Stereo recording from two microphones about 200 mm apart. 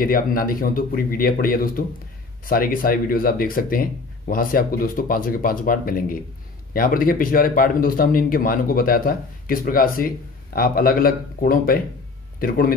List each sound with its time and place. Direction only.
0.0 s speech: 45° left (ahead or behind)